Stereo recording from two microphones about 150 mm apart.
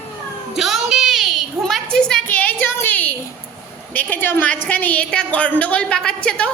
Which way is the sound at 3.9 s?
10° left (ahead or behind).